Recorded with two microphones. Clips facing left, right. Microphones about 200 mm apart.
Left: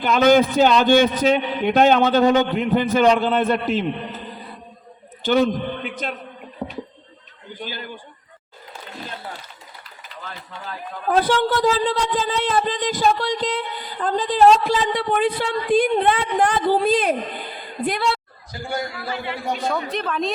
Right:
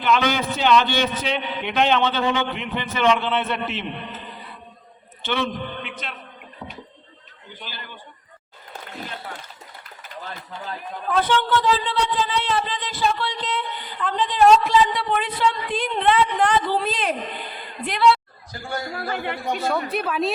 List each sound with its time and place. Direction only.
0.0 s a man's voice: 45° left (ahead or behind)
5.2 s a man's voice: 40° left (ahead or behind)
7.6 s a man's voice: 45° left (ahead or behind)
11.1 s a man's voice: 40° left (ahead or behind)
18.9 s speech: 50° right (ahead or behind)
19.5 s a woman's voice: 5° right (ahead or behind)